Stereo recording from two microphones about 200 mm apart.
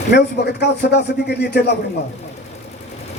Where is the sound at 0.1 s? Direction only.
55° left (ahead or behind).